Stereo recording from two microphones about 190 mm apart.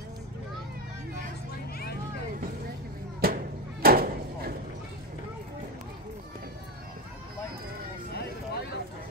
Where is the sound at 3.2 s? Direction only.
50° right (ahead or behind).